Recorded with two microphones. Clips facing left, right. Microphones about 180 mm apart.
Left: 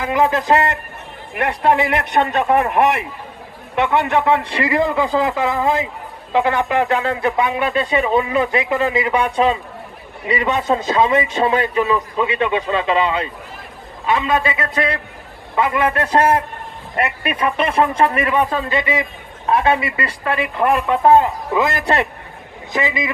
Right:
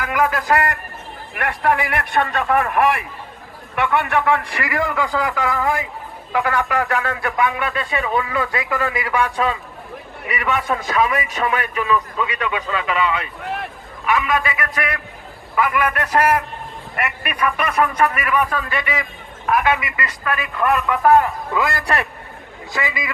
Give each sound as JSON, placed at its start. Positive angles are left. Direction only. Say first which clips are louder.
{"t": 0.0, "sound": "speech", "louder": "left 3 dB", "side_deg": 20}
{"t": 13.4, "sound": "a sound", "louder": "right 9 dB", "side_deg": -70}
{"t": 14.0, "sound": "speech", "louder": "left 2 dB", "side_deg": 25}